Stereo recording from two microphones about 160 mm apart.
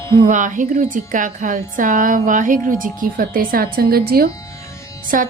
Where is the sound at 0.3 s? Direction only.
50° right (ahead or behind); by 4.0 s 70° right (ahead or behind).